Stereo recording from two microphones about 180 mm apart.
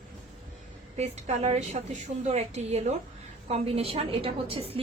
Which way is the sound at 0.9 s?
40° right (ahead or behind).